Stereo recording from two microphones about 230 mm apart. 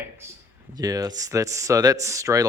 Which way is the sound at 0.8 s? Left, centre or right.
Centre.